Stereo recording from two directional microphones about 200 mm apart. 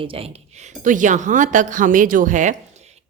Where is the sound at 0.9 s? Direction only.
40° right (ahead or behind).